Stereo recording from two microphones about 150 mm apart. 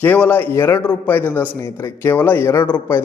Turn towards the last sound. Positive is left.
turn(degrees=15)  # may be behind; listen again after turning